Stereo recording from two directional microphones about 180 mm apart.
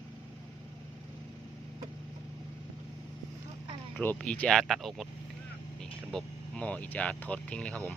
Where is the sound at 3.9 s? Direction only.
10° left (ahead or behind).